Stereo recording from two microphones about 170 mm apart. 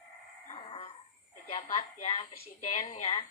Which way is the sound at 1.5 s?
40° left (ahead or behind).